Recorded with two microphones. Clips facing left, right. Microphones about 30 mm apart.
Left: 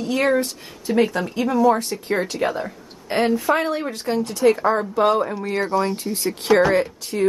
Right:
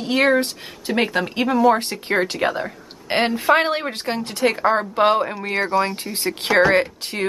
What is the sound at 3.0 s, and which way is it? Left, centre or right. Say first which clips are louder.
Speech: right 1 dB; right.